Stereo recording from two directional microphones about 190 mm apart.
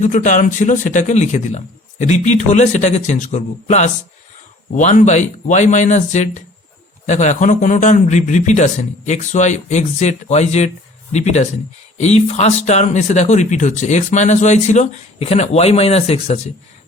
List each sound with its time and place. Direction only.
0.0 s speech: 40° left (ahead or behind)